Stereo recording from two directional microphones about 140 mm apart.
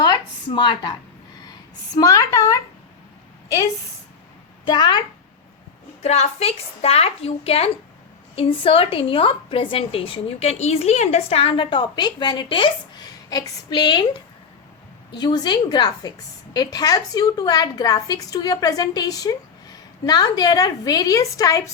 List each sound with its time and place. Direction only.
0.0 s a sound: 35° left (ahead or behind)
2.0 s a woman's voice: 25° left (ahead or behind)
4.6 s a woman's voice: 30° left (ahead or behind)
6.0 s a woman's voice: 50° left (ahead or behind); by 14.0 s 30° left (ahead or behind)
15.1 s a woman's voice: 35° left (ahead or behind)